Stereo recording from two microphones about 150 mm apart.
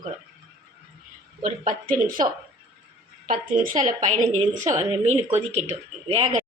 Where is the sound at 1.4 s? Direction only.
65° right (ahead or behind).